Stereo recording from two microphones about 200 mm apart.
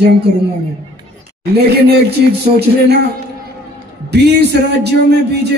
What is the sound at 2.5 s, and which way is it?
Speech, 55° right (ahead or behind).